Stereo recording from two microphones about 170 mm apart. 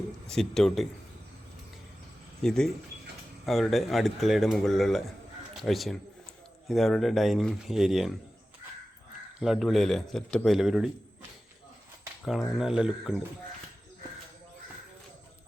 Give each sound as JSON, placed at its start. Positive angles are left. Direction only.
{"t": 0.3, "sound": "speech", "side_deg": 5}
{"t": 2.4, "sound": "speech", "side_deg": 5}
{"t": 9.4, "sound": "speech", "side_deg": 0}
{"t": 12.5, "sound": "speech", "side_deg": -5}